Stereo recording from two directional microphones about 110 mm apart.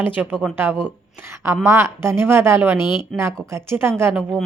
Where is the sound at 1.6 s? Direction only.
20° right (ahead or behind).